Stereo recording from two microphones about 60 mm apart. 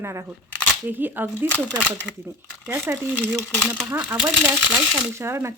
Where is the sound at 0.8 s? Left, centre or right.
Right.